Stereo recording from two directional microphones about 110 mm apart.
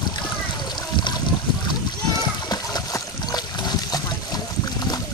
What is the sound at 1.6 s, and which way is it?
Splash, 35° left (ahead or behind).